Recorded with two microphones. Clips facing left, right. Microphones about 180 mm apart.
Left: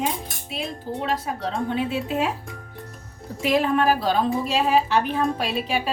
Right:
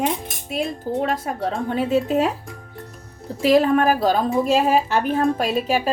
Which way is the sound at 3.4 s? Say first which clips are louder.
Right 5 dB; 40° right (ahead or behind).